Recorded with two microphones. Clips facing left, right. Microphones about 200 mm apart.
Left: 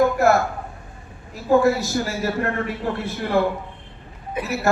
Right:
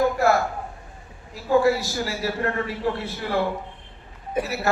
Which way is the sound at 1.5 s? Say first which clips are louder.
Left 2 dB; 45° left (ahead or behind).